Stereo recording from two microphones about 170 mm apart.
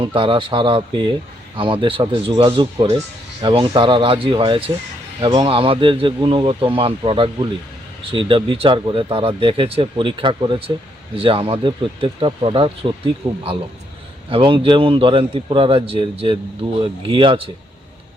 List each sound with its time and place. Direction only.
0.0 s speech: 30° right (ahead or behind)